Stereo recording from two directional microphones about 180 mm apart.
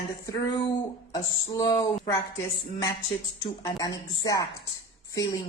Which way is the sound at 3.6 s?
20° left (ahead or behind).